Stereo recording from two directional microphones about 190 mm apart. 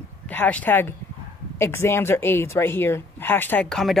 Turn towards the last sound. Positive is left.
turn(degrees=5)  # may be behind; listen again after turning